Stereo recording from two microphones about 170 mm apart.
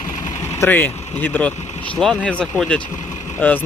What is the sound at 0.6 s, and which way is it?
Speech, 10° left (ahead or behind).